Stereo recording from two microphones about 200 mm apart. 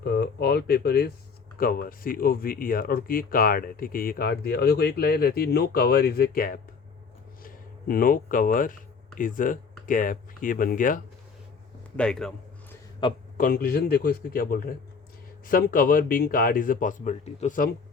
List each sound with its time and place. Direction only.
0.0 s speech: 50° left (ahead or behind)
11.9 s speech: 5° left (ahead or behind)
13.3 s speech: 45° left (ahead or behind)